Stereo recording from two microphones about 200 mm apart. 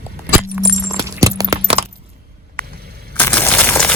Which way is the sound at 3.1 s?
10° left (ahead or behind).